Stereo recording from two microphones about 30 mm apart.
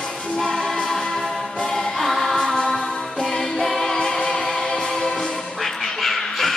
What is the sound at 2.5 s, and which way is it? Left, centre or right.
Music, centre.